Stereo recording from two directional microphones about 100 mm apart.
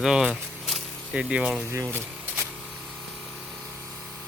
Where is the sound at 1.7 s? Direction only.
25° right (ahead or behind).